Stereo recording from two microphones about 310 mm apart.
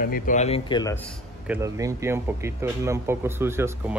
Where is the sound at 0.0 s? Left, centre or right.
Left; by 1.1 s centre.